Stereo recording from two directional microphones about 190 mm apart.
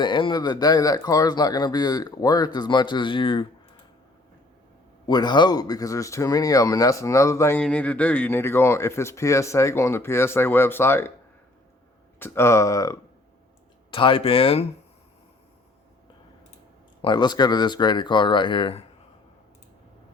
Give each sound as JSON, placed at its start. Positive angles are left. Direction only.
{"t": 0.0, "sound": "speech", "side_deg": 25}
{"t": 5.0, "sound": "speech", "side_deg": 20}
{"t": 12.2, "sound": "speech", "side_deg": 15}
{"t": 13.9, "sound": "speech", "side_deg": 25}
{"t": 17.0, "sound": "speech", "side_deg": 25}